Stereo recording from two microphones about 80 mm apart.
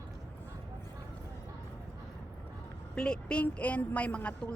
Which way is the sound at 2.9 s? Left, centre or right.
Centre.